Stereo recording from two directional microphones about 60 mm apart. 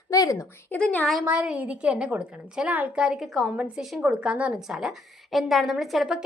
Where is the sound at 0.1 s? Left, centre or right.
Left.